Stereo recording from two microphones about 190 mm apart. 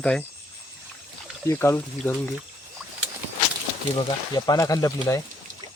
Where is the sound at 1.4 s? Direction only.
15° left (ahead or behind).